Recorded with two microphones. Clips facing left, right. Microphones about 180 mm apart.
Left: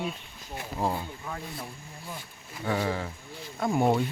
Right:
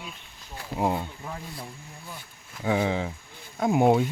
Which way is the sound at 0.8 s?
15° right (ahead or behind).